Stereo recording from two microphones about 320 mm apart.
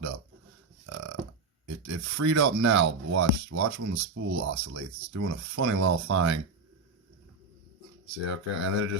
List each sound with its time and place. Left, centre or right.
0.9 s burping: right
1.6 s speech: right
8.3 s speech: right